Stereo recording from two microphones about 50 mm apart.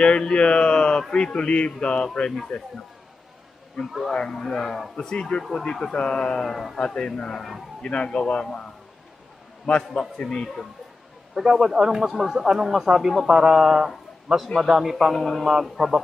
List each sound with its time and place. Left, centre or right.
0.0 s speech: centre
3.8 s a man's voice: centre
6.8 s speech: centre
7.3 s a man's voice: centre
7.8 s speech: centre
10.2 s speech: centre
11.3 s a man's voice: centre
15.1 s a man's voice: centre